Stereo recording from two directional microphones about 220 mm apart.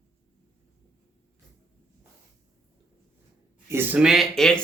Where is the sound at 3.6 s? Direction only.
10° right (ahead or behind).